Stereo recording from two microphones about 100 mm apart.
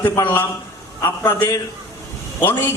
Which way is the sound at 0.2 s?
20° left (ahead or behind).